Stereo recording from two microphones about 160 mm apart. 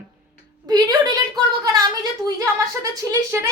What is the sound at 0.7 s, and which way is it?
A woman's voice, 25° right (ahead or behind).